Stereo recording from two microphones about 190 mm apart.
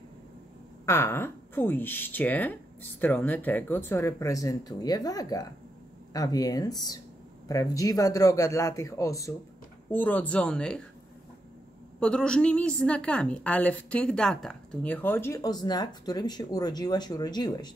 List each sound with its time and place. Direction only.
0.8 s a woman's voice: 15° left (ahead or behind)
12.0 s a woman's voice: 5° left (ahead or behind); by 17.7 s 20° left (ahead or behind)